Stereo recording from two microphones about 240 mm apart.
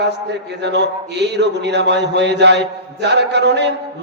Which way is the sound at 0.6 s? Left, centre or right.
Right.